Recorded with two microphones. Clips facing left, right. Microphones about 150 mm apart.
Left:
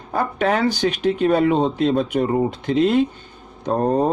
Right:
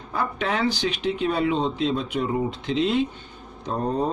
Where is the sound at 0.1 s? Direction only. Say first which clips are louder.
Left 6 dB; 50° left (ahead or behind).